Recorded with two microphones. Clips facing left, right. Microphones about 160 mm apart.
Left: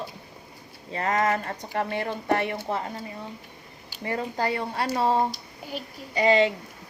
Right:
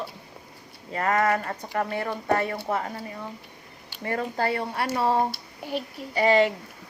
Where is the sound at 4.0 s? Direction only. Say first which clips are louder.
Right 1 dB; 25° left (ahead or behind).